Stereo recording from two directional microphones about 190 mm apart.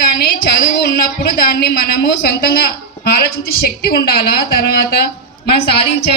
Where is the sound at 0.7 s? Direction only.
60° left (ahead or behind).